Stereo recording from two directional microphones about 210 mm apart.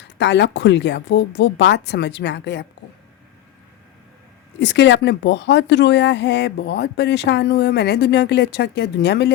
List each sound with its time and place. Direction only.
0.2 s speech: 55° left (ahead or behind)
4.6 s speech: 55° left (ahead or behind)